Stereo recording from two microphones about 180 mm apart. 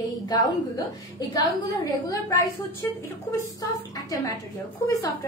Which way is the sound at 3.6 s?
20° left (ahead or behind).